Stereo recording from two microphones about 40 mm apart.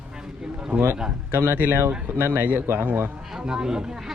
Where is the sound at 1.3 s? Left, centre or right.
Right.